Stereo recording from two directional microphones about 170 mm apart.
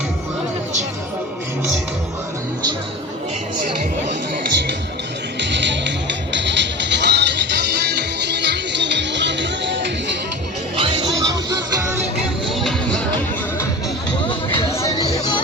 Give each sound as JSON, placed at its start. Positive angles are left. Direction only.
{"t": 5.4, "sound": "music", "side_deg": -90}
{"t": 10.8, "sound": "music", "side_deg": -30}
{"t": 12.5, "sound": "music", "side_deg": 0}
{"t": 14.3, "sound": "music", "side_deg": 30}
{"t": 14.7, "sound": "music", "side_deg": 15}